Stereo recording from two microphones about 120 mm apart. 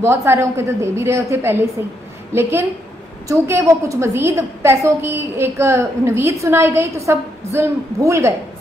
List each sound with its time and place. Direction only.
0.0 s a woman's voice: 20° right (ahead or behind)